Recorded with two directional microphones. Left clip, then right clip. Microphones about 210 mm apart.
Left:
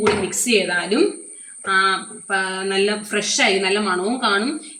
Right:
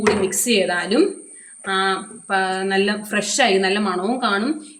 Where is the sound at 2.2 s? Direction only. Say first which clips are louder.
Right 2 dB; 35° right (ahead or behind).